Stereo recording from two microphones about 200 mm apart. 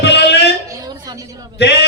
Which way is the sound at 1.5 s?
55° left (ahead or behind).